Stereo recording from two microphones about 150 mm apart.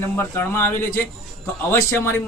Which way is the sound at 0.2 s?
15° left (ahead or behind).